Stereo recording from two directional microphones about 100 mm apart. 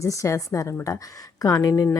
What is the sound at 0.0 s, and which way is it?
Speech, 30° left (ahead or behind).